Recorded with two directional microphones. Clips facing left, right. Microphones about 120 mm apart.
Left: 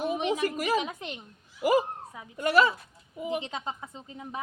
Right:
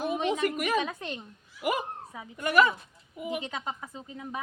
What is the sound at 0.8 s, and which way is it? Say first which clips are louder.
Speech: right 2 dB; 15° left (ahead or behind).